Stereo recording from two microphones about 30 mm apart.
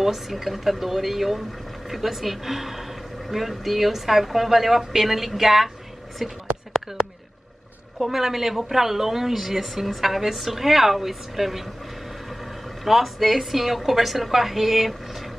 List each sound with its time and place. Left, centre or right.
0.0 s speech: centre
6.7 s a sound: centre
8.0 s speech: centre
12.8 s a woman's voice: centre